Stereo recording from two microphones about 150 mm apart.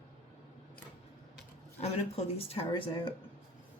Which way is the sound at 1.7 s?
45° left (ahead or behind).